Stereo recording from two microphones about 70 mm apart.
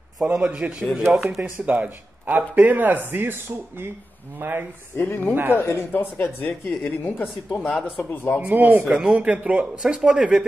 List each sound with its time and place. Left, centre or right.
0.2 s speech: centre
1.1 s speech: centre
1.4 s speech: right
4.4 s speech: right
4.9 s a woman's voice: left
8.4 s speech: right
8.7 s a man's voice: centre
9.8 s a man's voice: centre